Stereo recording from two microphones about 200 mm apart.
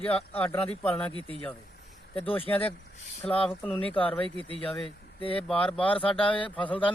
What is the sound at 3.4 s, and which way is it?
Speech, 5° left (ahead or behind).